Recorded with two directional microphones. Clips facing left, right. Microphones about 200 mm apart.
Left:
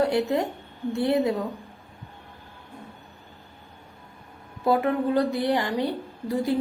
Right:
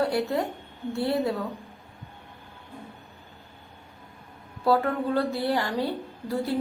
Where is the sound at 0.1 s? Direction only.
20° left (ahead or behind).